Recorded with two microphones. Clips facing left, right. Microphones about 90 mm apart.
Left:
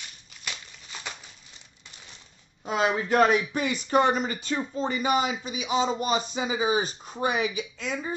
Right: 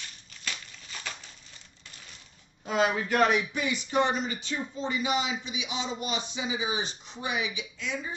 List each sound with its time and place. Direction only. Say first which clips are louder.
2.6 s speech: left 1 dB; 30° left (ahead or behind)